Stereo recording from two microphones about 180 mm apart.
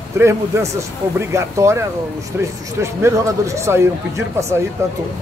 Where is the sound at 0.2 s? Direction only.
15° right (ahead or behind).